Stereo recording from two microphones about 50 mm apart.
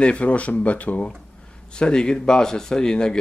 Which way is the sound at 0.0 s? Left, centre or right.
Left.